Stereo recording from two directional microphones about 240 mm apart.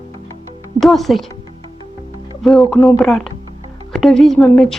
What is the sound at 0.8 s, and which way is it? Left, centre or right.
Speech, centre.